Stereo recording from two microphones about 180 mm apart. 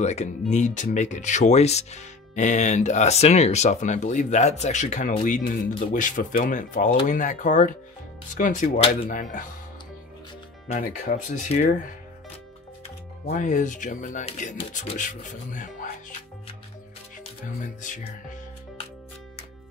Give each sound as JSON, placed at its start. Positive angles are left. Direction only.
{"t": 0.0, "sound": "speech", "side_deg": 40}
{"t": 9.1, "sound": "speech", "side_deg": 45}
{"t": 10.7, "sound": "speech", "side_deg": 45}
{"t": 13.2, "sound": "speech", "side_deg": 40}
{"t": 17.8, "sound": "speech", "side_deg": 45}